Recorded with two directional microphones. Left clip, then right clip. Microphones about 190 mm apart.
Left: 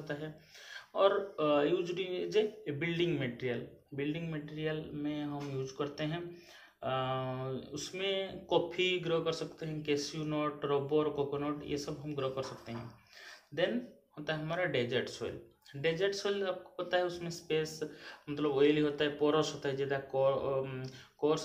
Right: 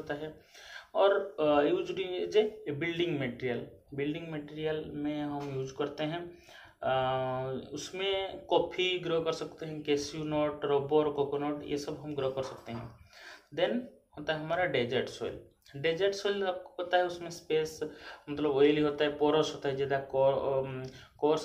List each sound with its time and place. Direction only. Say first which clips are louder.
0.0 s speech: right 3 dB; centre (ahead or behind)
14.2 s speech: right 4 dB; 5° right (ahead or behind)